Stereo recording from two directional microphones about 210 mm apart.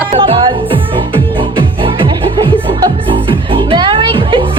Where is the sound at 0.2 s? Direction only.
25° right (ahead or behind).